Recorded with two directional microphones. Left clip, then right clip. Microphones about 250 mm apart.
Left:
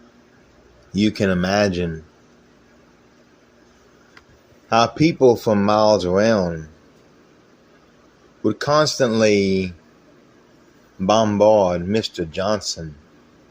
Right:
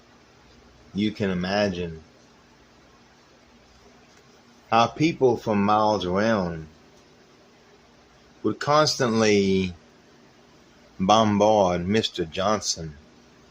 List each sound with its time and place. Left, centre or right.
0.9 s speech: centre
4.7 s speech: centre
8.4 s speech: centre
11.0 s speech: centre